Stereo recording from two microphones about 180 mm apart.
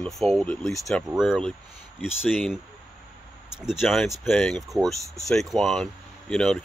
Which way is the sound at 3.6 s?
Centre (ahead or behind).